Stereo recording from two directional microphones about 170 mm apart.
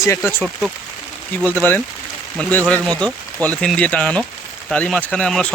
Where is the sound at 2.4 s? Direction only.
10° left (ahead or behind).